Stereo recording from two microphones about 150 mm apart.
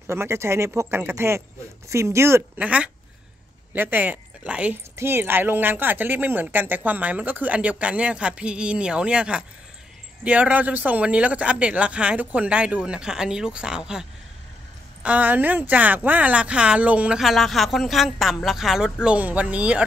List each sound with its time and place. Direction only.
0.0 s speech: 15° right (ahead or behind)
15.0 s speech: 10° right (ahead or behind)